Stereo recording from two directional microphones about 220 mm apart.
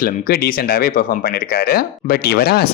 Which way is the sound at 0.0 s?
45° left (ahead or behind).